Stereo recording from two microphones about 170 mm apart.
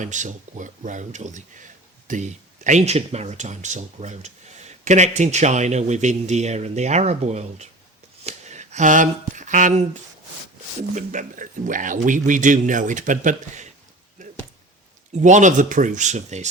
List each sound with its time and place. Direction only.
0.0 s speech: 45° right (ahead or behind)
14.2 s a sound: 50° right (ahead or behind)
15.2 s speech: 45° right (ahead or behind)